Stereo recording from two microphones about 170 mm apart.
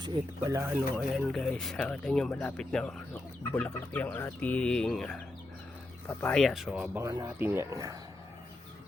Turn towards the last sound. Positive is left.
turn(degrees=-20)  # may be behind; listen again after turning